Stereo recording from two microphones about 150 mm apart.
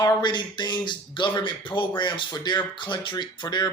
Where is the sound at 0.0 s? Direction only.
30° left (ahead or behind).